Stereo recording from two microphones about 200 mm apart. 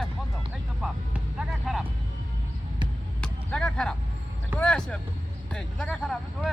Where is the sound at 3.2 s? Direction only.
5° left (ahead or behind).